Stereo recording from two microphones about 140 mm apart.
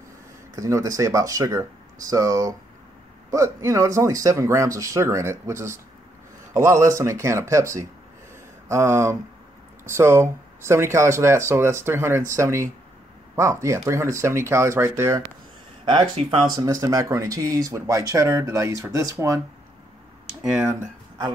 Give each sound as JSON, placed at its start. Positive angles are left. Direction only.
{"t": 0.6, "sound": "speech", "side_deg": -20}
{"t": 15.8, "sound": "speech", "side_deg": -35}
{"t": 16.5, "sound": "speech", "side_deg": -25}
{"t": 20.4, "sound": "speech", "side_deg": -5}